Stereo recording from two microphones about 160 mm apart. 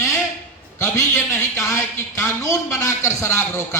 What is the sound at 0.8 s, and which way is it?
A man's voice, 15° left (ahead or behind).